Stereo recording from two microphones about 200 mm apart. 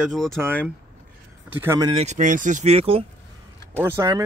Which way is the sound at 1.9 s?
35° right (ahead or behind).